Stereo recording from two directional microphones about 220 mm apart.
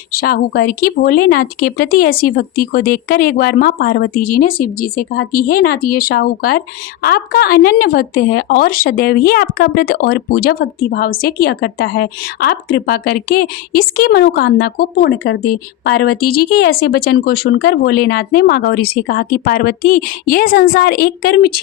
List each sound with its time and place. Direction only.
0.1 s speech: 45° left (ahead or behind)